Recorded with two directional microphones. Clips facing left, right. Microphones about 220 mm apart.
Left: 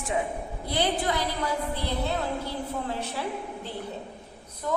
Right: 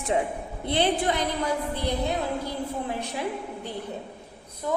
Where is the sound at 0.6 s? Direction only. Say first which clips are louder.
Right 3 dB; 25° right (ahead or behind).